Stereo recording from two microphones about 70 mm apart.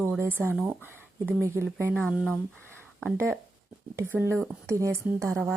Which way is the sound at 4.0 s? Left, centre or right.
Right.